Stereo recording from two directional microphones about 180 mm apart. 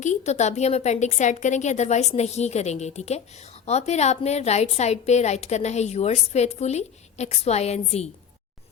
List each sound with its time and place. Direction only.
0.0 s a woman's voice: 40° left (ahead or behind)